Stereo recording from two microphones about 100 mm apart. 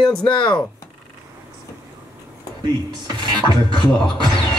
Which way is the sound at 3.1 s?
50° left (ahead or behind).